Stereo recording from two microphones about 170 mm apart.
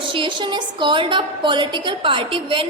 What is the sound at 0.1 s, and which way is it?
A woman's voice, 30° right (ahead or behind).